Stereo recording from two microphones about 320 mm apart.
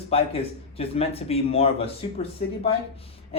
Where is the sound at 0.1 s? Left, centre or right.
Centre.